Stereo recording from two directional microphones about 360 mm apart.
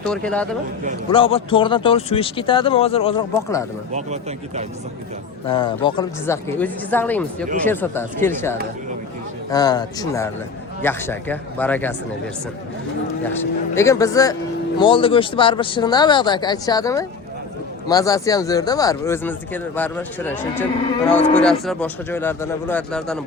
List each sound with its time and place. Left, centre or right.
0.0 s speech: centre
1.1 s speech: centre
3.9 s speech: centre
5.5 s speech: centre
13.2 s speech: centre